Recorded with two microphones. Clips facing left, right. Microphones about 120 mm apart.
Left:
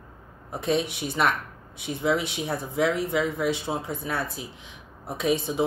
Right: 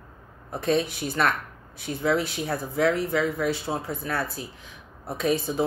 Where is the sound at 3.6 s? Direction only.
15° left (ahead or behind).